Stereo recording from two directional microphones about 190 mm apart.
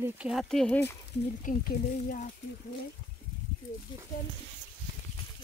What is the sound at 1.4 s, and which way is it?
Speech, 45° left (ahead or behind).